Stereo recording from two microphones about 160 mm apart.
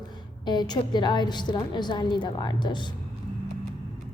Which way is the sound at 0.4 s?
25° left (ahead or behind).